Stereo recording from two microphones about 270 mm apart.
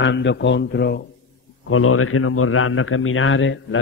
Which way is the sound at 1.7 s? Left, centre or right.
Left.